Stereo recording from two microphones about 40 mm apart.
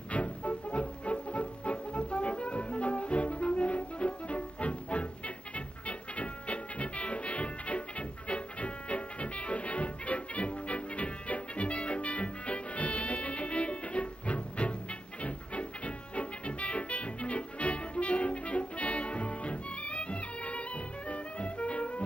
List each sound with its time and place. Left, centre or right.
0.1 s music: left